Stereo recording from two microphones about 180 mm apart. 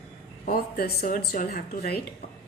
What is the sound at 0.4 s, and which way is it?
Speech, 55° left (ahead or behind).